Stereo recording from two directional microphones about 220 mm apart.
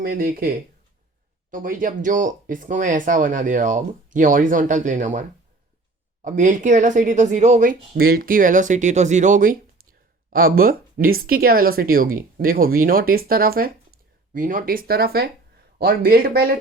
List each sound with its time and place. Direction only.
0.0 s speech: 40° right (ahead or behind)
6.2 s speech: 35° right (ahead or behind)